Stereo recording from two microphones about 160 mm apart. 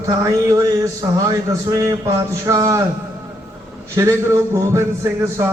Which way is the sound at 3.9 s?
20° right (ahead or behind).